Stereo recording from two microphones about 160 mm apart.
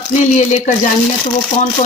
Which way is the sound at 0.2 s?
45° left (ahead or behind).